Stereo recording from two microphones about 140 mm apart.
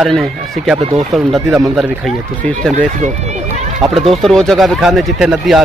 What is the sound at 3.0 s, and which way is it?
Run, 55° right (ahead or behind).